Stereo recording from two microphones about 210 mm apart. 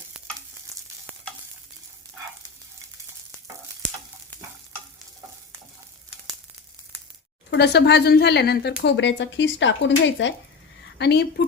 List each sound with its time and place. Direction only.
7.5 s speech: 50° left (ahead or behind)